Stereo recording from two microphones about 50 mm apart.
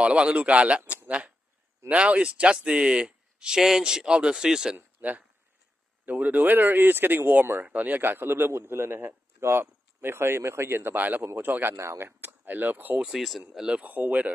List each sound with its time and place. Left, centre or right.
0.0 s speech: right
4.7 s speech: right
11.0 s speech: right
11.7 s speech: right
12.2 s speech: right
13.0 s speech: centre
13.5 s speech: centre
13.8 s speech: right